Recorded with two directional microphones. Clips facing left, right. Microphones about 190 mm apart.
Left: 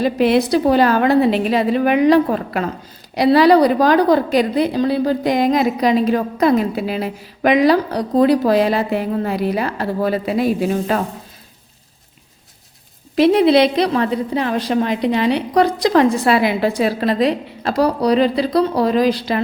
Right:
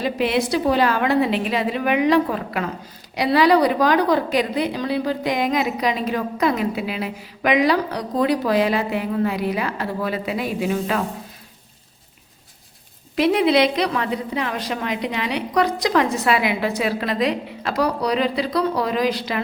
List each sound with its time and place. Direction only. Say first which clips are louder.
0.0 s a woman's voice: left 6 dB; 40° left (ahead or behind)
13.1 s a woman's voice: left 5 dB; 35° left (ahead or behind)